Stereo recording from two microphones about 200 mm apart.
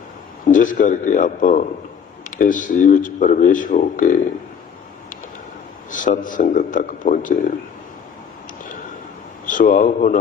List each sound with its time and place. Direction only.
0.4 s speech: 40° left (ahead or behind)
5.9 s speech: 40° left (ahead or behind)
9.5 s speech: 40° left (ahead or behind)